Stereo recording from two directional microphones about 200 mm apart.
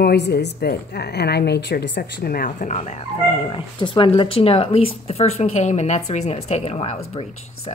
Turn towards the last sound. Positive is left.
turn(degrees=30)  # may be behind; listen again after turning